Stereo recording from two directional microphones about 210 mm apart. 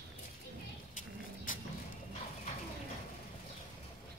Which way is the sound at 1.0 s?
40° left (ahead or behind).